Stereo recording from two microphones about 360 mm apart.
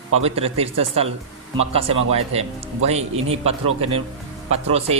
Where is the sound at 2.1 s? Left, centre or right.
Centre.